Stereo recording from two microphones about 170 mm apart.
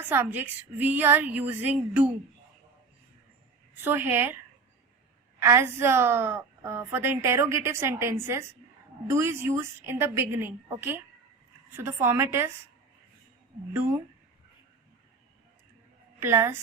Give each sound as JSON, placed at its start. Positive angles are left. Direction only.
{"t": 0.0, "sound": "a woman's voice", "side_deg": -10}
{"t": 3.8, "sound": "a woman's voice", "side_deg": -10}
{"t": 5.4, "sound": "a woman's voice", "side_deg": -15}
{"t": 16.2, "sound": "a woman's voice", "side_deg": -15}